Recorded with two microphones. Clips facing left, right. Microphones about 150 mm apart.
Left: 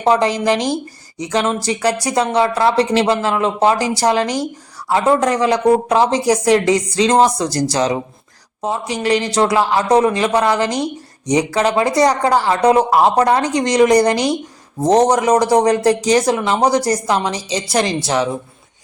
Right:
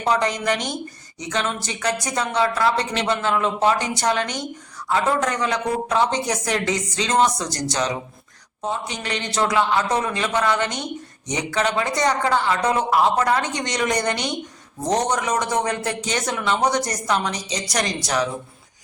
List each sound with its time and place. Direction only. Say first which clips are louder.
0.0 s a man's voice: left 6 dB; 30° left (ahead or behind)